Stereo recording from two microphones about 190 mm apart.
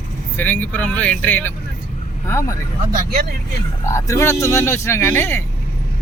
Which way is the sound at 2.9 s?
50° right (ahead or behind).